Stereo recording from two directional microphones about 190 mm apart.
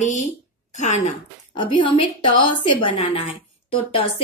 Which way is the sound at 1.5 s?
25° left (ahead or behind).